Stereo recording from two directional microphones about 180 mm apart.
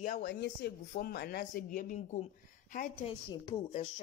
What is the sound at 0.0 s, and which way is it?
Speech, 50° left (ahead or behind).